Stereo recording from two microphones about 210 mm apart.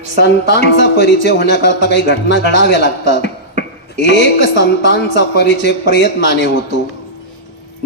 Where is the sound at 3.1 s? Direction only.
55° left (ahead or behind).